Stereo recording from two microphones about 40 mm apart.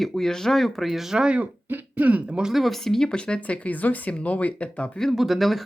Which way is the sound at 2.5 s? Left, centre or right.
Centre.